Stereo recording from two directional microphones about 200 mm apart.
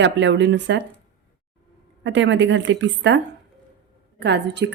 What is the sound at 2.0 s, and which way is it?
Speech, 65° right (ahead or behind).